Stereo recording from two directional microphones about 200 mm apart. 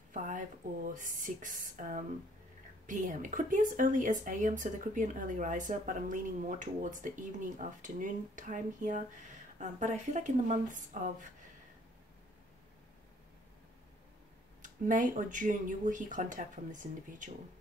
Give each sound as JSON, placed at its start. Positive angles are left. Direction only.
{"t": 0.1, "sound": "speech", "side_deg": -40}
{"t": 14.6, "sound": "speech", "side_deg": -40}